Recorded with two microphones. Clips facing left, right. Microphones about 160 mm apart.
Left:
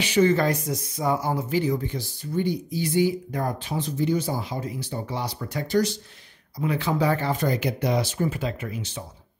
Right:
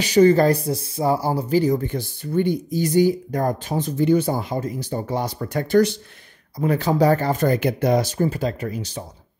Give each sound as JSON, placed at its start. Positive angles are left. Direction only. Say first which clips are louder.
{"t": 0.0, "sound": "speech", "louder": "right 6 dB", "side_deg": -40}
{"t": 6.6, "sound": "speech", "louder": "right 6 dB", "side_deg": -45}